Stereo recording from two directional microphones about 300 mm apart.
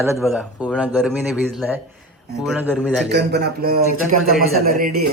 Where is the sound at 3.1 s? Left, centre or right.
Right.